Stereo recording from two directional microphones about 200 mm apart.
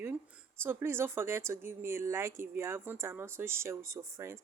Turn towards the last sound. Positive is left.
turn(degrees=-15)  # may be behind; listen again after turning